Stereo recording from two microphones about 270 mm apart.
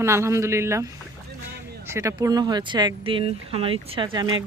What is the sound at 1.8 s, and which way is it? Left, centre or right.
Speech, centre.